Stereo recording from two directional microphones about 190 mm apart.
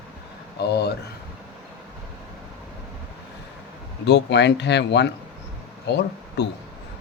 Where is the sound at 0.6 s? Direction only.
60° left (ahead or behind).